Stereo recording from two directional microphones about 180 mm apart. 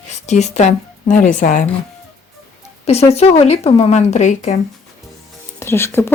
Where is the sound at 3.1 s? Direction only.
35° left (ahead or behind).